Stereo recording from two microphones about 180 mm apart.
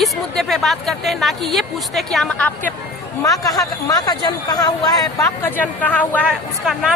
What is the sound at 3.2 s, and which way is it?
A man's voice, 20° left (ahead or behind).